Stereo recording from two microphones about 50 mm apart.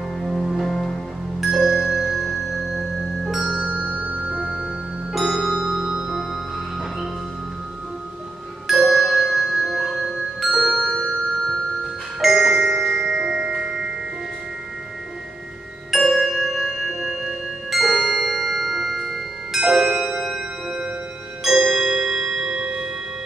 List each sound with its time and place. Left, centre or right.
0.2 s music: centre
1.4 s music: centre
3.4 s music: right
5.1 s music: centre
8.6 s music: centre
11.8 s glockenspiel: centre
13.2 s music: centre
15.9 s music: centre
21.6 s tubular bells: centre